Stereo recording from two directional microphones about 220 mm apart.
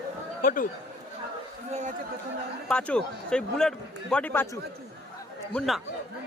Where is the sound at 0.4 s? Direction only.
40° left (ahead or behind).